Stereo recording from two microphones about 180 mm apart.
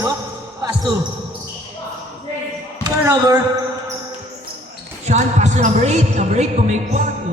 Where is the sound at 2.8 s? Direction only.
20° right (ahead or behind).